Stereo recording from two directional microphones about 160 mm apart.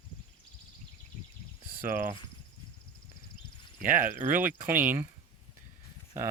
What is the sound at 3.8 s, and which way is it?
Speech, 60° right (ahead or behind).